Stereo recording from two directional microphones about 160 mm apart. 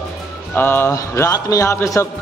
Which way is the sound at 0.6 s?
15° left (ahead or behind).